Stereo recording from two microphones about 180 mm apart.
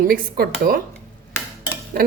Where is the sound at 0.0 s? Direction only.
50° right (ahead or behind).